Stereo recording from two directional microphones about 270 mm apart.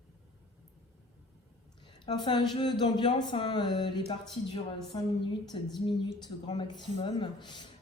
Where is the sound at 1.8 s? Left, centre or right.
Centre.